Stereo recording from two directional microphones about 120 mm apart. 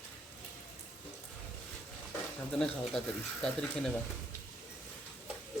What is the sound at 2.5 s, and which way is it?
Speech, 5° left (ahead or behind).